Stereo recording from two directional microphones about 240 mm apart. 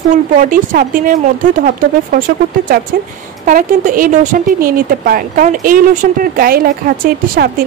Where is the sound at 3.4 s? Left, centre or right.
Right.